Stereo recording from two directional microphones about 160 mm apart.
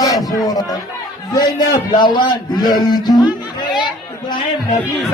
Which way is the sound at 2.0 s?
30° left (ahead or behind).